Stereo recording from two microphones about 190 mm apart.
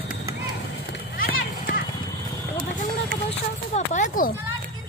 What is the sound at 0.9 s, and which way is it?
Clip-clop, 50° left (ahead or behind).